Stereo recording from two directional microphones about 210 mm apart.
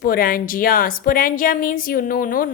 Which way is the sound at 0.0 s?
45° left (ahead or behind).